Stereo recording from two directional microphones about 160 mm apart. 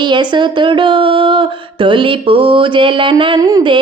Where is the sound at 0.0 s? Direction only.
30° right (ahead or behind).